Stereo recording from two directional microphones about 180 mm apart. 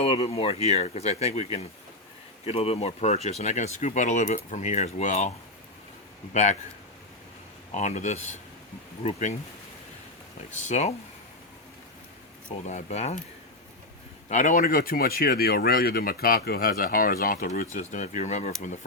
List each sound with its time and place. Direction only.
0.0 s speech: 35° left (ahead or behind)
6.3 s speech: 40° left (ahead or behind)
7.7 s speech: 40° left (ahead or behind)
10.5 s speech: 40° left (ahead or behind)
12.6 s speech: 40° left (ahead or behind)
14.3 s speech: 40° left (ahead or behind)
17.7 s speech: 45° left (ahead or behind)